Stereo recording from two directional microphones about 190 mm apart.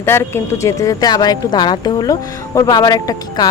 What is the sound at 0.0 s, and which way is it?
Speech, 10° left (ahead or behind).